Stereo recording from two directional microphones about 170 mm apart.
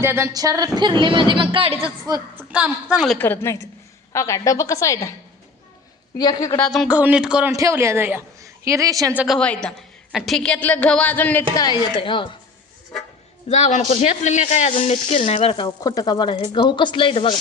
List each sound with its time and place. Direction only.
0.0 s speech: 15° right (ahead or behind)
2.5 s a woman's voice: 5° right (ahead or behind)
3.2 s a woman's voice: 15° left (ahead or behind)
6.1 s a woman's voice: 25° left (ahead or behind)
6.6 s a woman's voice: centre (ahead or behind)
7.5 s a woman's voice: 15° right (ahead or behind)
9.1 s a woman's voice: centre (ahead or behind)
11.5 s a woman's voice: 25° left (ahead or behind)
13.5 s speech: 45° left (ahead or behind)